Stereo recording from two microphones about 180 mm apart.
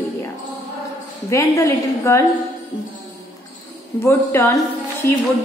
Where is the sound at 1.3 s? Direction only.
15° left (ahead or behind).